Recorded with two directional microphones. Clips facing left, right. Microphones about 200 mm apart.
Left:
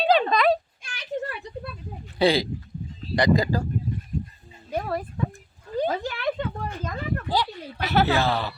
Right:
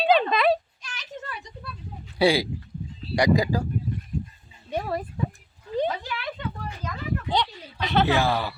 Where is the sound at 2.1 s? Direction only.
10° right (ahead or behind).